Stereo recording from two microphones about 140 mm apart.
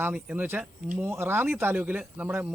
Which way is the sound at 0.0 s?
10° right (ahead or behind).